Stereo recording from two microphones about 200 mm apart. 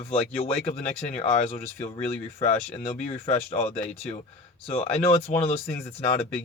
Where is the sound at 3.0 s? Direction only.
30° left (ahead or behind).